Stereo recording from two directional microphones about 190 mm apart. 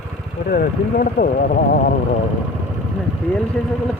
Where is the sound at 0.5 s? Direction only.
50° left (ahead or behind).